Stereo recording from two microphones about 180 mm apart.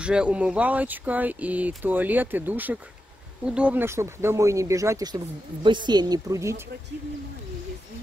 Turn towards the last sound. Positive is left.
turn(degrees=-15)  # may be behind; listen again after turning